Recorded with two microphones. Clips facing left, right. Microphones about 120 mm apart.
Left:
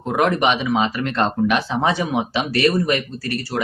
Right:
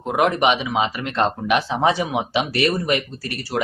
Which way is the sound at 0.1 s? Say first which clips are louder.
Even; 20° right (ahead or behind).